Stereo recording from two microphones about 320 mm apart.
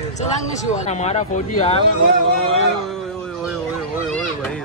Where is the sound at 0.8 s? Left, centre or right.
Left.